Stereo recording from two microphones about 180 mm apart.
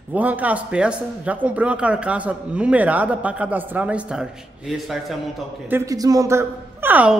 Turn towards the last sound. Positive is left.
turn(degrees=-10)  # may be behind; listen again after turning